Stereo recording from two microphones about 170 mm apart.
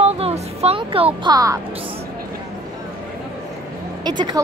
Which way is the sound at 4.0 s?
25° right (ahead or behind).